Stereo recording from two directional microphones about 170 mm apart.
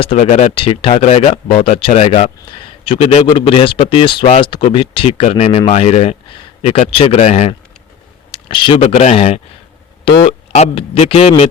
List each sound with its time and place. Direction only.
0.0 s speech: 40° left (ahead or behind)
8.3 s speech: 30° left (ahead or behind)